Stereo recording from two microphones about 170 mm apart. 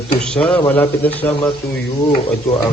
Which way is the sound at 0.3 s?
5° left (ahead or behind).